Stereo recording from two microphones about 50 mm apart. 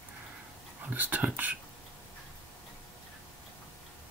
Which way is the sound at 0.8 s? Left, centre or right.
Right.